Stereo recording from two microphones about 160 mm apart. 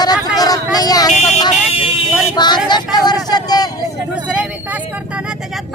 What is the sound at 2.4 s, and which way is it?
Vehicle, 25° left (ahead or behind).